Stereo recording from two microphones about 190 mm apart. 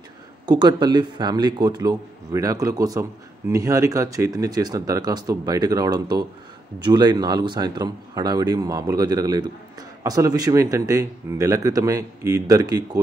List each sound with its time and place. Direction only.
0.5 s speech: 20° right (ahead or behind)